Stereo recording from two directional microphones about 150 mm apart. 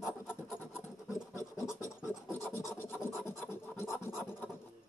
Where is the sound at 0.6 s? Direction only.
15° left (ahead or behind).